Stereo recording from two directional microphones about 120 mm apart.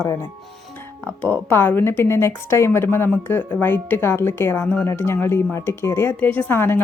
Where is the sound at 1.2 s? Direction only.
20° left (ahead or behind).